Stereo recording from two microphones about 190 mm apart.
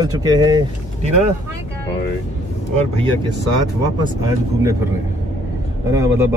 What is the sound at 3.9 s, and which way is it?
Speech, 20° right (ahead or behind).